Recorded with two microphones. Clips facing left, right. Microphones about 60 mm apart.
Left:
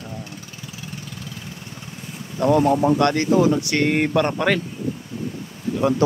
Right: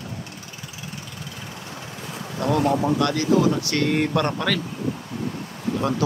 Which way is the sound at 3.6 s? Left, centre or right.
Left.